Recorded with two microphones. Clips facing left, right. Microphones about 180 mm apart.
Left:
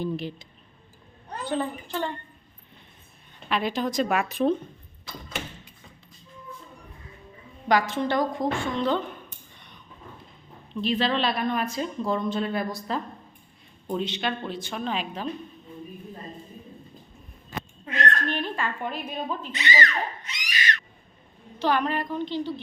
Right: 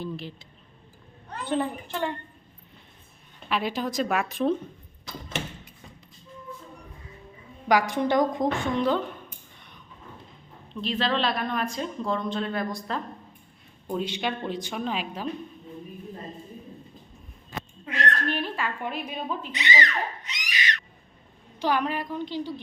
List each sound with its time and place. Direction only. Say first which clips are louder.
0.0 s speech: left 5 dB; 15° left (ahead or behind)
1.5 s a woman's voice: right 1 dB; 20° right (ahead or behind)
3.5 s a woman's voice: left 2 dB; 10° right (ahead or behind)
7.7 s a woman's voice: right 1 dB; 15° right (ahead or behind)
10.8 s a woman's voice: left 2 dB; centre (ahead or behind)
13.8 s a woman's voice: left 1 dB; 10° right (ahead or behind)
17.8 s a sound: left 1 dB; 5° right (ahead or behind)
19.1 s speech: left 1 dB; 45° left (ahead or behind)
19.5 s screaming: left 1 dB; 20° right (ahead or behind)
21.6 s a woman's voice: left 1 dB; 10° right (ahead or behind)